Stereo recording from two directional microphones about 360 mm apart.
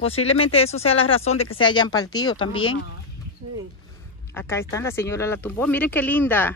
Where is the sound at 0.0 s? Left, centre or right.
Centre.